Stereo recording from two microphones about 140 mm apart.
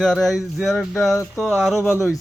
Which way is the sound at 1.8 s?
15° left (ahead or behind).